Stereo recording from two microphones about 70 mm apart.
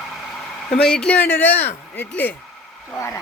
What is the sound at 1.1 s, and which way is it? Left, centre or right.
Speech, left.